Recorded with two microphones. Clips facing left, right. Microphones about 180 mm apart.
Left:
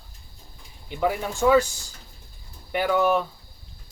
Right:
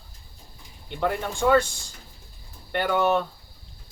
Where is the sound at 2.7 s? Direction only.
5° left (ahead or behind).